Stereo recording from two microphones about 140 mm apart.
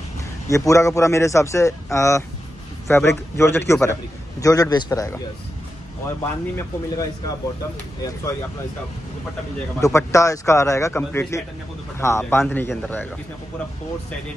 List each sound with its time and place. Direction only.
0.5 s a man's voice: 20° left (ahead or behind)
9.8 s a man's voice: 20° left (ahead or behind)